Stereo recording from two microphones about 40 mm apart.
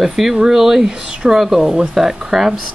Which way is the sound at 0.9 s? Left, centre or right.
Centre.